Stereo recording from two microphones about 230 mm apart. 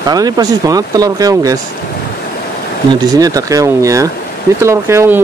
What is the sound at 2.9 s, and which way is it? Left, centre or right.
Speech, centre.